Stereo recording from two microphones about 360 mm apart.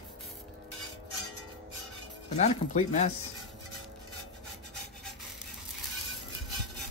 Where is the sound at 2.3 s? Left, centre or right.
Centre.